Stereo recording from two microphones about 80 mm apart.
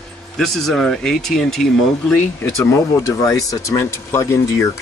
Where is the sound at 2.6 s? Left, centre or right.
Left.